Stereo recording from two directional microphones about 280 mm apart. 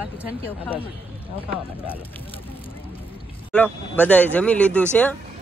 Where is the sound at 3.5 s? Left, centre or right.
Centre.